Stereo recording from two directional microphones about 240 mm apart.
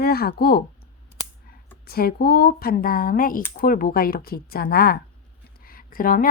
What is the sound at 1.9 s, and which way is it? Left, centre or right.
A woman's voice, left.